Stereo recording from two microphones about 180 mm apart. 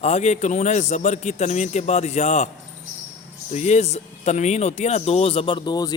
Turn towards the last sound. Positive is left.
turn(degrees=25)  # may be behind; listen again after turning